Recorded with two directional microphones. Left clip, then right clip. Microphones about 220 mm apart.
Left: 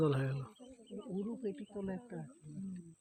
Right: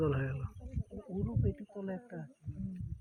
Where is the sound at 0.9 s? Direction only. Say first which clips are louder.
Right 1 dB; 40° right (ahead or behind).